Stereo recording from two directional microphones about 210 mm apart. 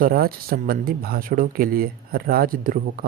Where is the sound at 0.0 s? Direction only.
45° right (ahead or behind).